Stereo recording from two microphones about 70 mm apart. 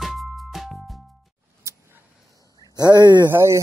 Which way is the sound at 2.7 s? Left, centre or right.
Right.